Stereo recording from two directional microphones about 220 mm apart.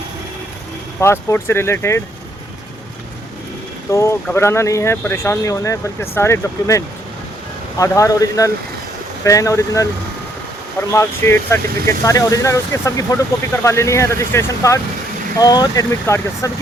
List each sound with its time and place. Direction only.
0.9 s speech: 10° left (ahead or behind)
3.8 s speech: 15° left (ahead or behind)